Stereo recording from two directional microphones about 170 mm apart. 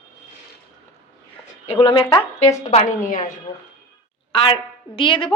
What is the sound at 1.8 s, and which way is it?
Speech, 30° left (ahead or behind).